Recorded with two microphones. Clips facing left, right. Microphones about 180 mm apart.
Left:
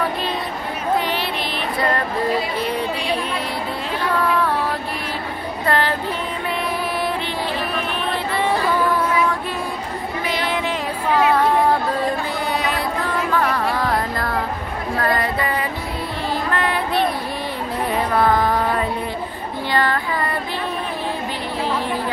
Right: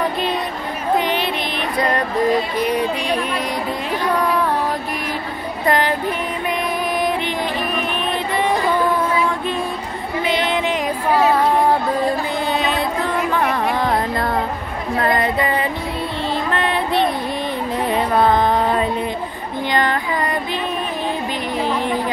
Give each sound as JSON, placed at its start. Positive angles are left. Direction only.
{"t": 0.9, "sound": "music", "side_deg": -20}
{"t": 2.6, "sound": "speech", "side_deg": -15}
{"t": 5.7, "sound": "music", "side_deg": -15}
{"t": 7.0, "sound": "music", "side_deg": -15}
{"t": 10.2, "sound": "a sound", "side_deg": -20}
{"t": 12.5, "sound": "a sound", "side_deg": -20}
{"t": 13.3, "sound": "music", "side_deg": -20}
{"t": 15.0, "sound": "a sound", "side_deg": -20}
{"t": 17.9, "sound": "music", "side_deg": -20}
{"t": 19.7, "sound": "female singing", "side_deg": -20}